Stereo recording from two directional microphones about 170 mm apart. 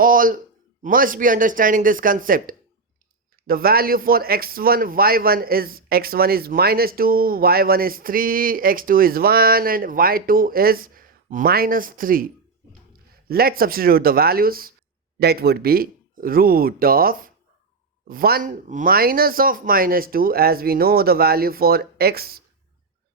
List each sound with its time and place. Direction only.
0.0 s speech: 55° right (ahead or behind)